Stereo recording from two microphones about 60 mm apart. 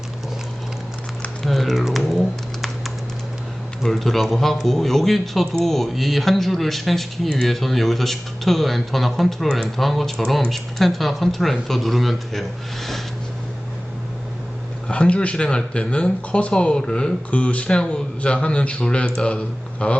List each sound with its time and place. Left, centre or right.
1.4 s typing: centre
3.8 s a man's voice: centre
14.8 s speech: centre